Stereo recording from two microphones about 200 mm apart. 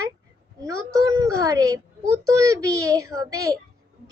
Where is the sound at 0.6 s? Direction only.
15° right (ahead or behind).